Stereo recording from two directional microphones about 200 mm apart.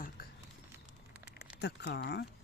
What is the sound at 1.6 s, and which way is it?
Speech, 60° left (ahead or behind).